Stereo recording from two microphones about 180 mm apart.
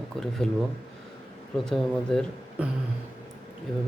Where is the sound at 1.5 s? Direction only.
Centre (ahead or behind).